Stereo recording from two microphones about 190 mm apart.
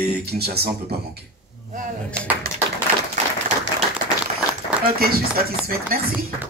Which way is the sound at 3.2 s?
40° right (ahead or behind).